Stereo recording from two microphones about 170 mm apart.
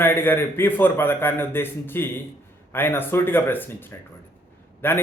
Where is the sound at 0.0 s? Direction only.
10° left (ahead or behind).